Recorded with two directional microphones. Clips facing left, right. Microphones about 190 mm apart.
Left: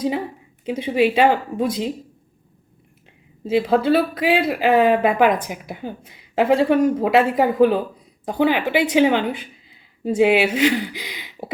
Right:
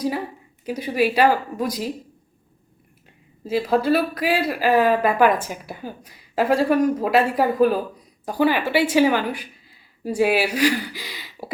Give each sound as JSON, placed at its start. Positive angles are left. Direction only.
{"t": 0.6, "sound": "speech", "side_deg": 25}
{"t": 3.4, "sound": "speech", "side_deg": 25}